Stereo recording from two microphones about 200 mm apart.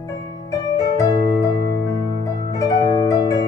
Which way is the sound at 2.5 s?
15° left (ahead or behind).